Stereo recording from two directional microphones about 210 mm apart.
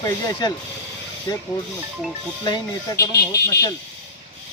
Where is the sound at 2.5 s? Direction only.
15° left (ahead or behind).